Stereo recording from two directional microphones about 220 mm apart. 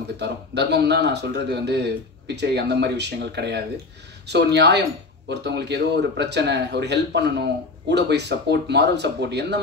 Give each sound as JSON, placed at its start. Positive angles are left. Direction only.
{"t": 0.2, "sound": "a man's voice", "side_deg": -50}